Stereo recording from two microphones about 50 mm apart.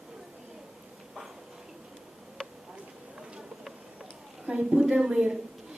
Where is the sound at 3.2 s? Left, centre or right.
Centre.